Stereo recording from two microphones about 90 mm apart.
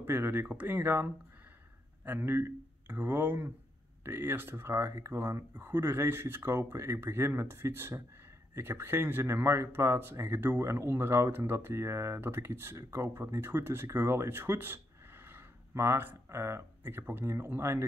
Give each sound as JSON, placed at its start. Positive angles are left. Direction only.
{"t": 0.0, "sound": "speech", "side_deg": -25}